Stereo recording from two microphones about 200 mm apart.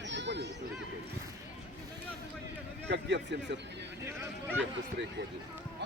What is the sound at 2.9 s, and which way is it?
Speech, 60° right (ahead or behind).